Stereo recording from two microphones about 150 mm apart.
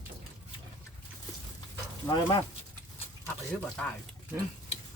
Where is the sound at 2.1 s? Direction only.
25° left (ahead or behind).